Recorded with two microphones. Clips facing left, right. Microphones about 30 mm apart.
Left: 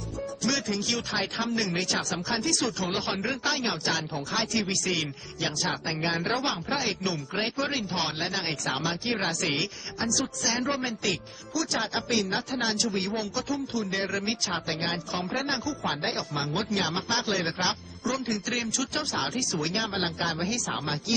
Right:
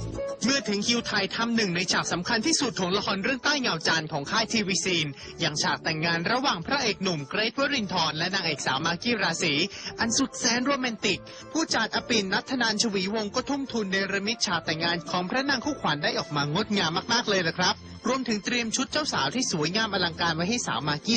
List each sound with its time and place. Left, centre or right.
0.3 s speech: centre